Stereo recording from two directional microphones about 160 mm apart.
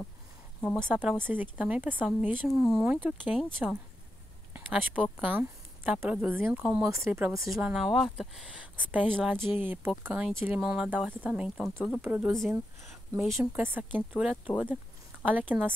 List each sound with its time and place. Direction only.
0.6 s speech: 5° left (ahead or behind)
0.8 s speech: 10° right (ahead or behind)
5.0 s speech: 10° right (ahead or behind)
12.3 s speech: centre (ahead or behind)
13.4 s speech: 15° right (ahead or behind)